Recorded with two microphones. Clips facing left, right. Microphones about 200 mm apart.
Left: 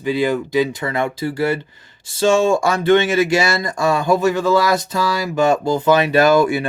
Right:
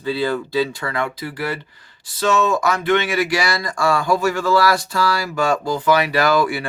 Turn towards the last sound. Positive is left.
turn(degrees=20)  # may be behind; listen again after turning